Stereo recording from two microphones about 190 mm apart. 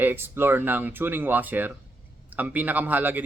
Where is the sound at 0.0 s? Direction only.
10° right (ahead or behind).